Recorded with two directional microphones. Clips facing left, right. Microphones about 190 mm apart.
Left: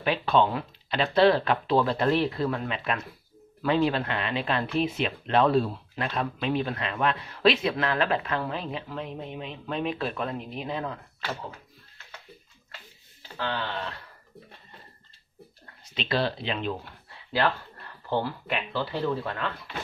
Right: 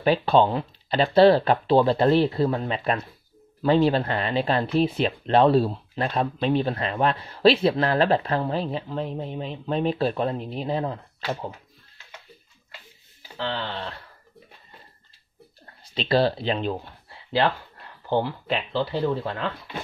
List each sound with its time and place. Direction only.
0.0 s speech: 35° right (ahead or behind)
13.4 s speech: 30° right (ahead or behind)
15.6 s speech: 35° right (ahead or behind)
18.1 s speech: 25° right (ahead or behind)